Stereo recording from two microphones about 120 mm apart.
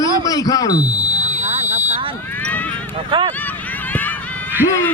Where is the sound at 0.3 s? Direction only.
30° left (ahead or behind).